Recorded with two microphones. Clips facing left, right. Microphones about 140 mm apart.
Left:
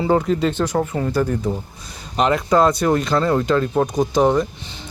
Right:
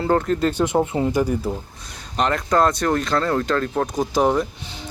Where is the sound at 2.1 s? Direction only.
5° left (ahead or behind).